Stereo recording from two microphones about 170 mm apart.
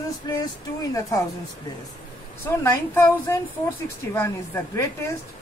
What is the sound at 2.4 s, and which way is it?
A woman's voice, 15° left (ahead or behind).